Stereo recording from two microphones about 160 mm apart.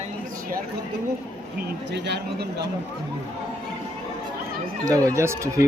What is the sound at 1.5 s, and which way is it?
Speech, 90° right.